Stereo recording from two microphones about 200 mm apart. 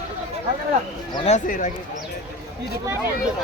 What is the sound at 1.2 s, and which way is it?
Speech, 40° left (ahead or behind).